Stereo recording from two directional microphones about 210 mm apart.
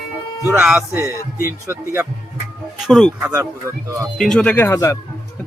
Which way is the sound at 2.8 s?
Centre (ahead or behind).